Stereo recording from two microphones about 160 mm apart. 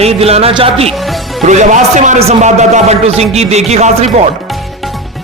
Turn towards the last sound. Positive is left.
turn(degrees=-45)  # may be behind; listen again after turning